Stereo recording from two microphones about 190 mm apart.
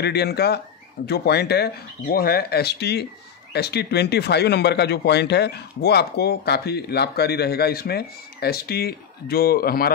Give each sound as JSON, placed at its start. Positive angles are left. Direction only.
{"t": 0.0, "sound": "speech", "side_deg": 60}